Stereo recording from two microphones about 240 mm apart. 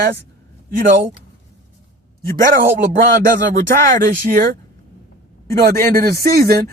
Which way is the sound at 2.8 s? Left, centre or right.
Right.